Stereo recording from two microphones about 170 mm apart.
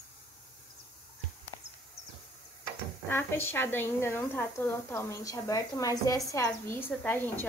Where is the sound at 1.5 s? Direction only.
30° left (ahead or behind).